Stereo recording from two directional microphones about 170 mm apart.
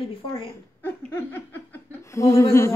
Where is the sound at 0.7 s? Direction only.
15° left (ahead or behind).